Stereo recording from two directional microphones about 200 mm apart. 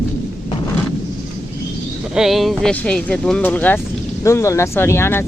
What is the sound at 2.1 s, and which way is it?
Speech, centre (ahead or behind).